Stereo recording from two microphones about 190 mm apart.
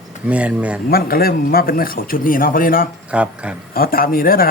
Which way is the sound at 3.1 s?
5° right (ahead or behind).